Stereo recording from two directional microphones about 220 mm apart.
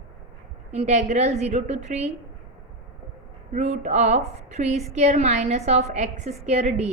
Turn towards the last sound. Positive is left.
turn(degrees=-30)  # may be behind; listen again after turning